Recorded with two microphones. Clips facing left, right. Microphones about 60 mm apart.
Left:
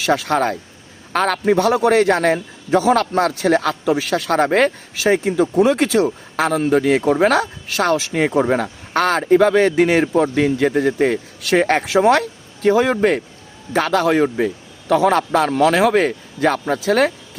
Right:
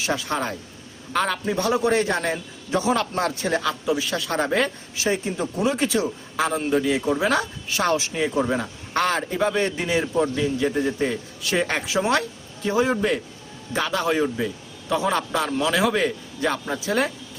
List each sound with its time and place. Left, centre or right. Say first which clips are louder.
0.0 s a man's voice: left 8 dB; left